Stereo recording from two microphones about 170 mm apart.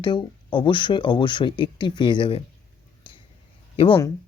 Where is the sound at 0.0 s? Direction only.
30° left (ahead or behind).